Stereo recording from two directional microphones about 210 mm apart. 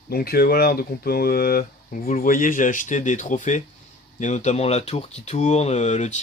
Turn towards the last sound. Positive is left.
turn(degrees=35)  # may be behind; listen again after turning